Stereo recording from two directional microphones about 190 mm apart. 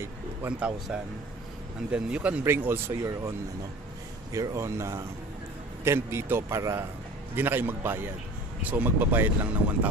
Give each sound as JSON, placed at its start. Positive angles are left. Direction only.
{"t": 0.0, "sound": "speech", "side_deg": -10}